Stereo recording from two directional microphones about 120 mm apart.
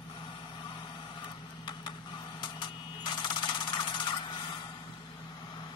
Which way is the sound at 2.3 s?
40° left (ahead or behind).